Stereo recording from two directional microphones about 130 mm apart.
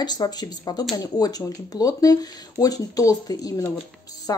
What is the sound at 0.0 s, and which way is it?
Speech, 30° left (ahead or behind).